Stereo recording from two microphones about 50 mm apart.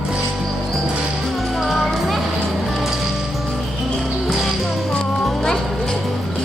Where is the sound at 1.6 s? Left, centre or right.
Centre.